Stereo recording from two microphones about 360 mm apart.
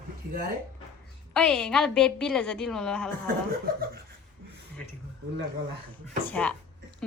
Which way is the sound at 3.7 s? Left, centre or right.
Right.